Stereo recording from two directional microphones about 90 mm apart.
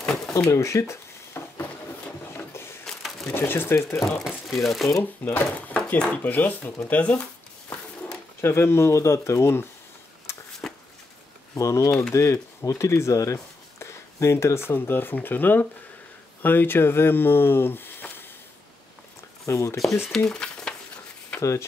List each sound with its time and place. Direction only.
0.3 s a sound: 35° left (ahead or behind)
2.8 s crushing: 5° left (ahead or behind)
3.3 s speech: 25° left (ahead or behind)
4.0 s speech: centre (ahead or behind)
5.2 s speech: 15° left (ahead or behind)
8.4 s speech: 30° left (ahead or behind)
10.3 s a sound: 30° left (ahead or behind)
11.5 s speech: 35° left (ahead or behind)
19.4 s speech: 35° left (ahead or behind)
20.2 s a sound: 10° left (ahead or behind)
21.4 s speech: 35° left (ahead or behind)